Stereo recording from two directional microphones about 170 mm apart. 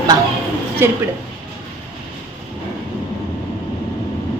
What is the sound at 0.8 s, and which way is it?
Speech, 15° right (ahead or behind).